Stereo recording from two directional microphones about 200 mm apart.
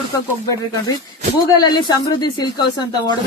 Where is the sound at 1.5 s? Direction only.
20° left (ahead or behind).